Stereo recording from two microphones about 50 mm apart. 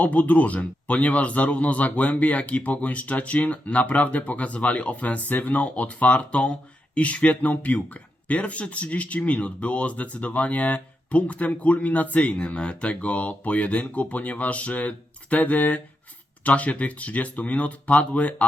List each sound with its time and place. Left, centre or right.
0.0 s speech: left